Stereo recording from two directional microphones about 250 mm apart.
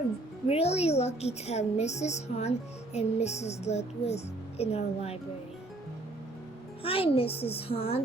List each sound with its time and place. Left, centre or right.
0.4 s speech: left
6.8 s speech: left